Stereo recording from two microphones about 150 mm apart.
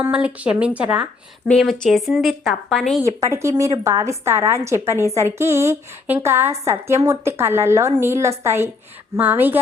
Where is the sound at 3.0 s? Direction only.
20° right (ahead or behind).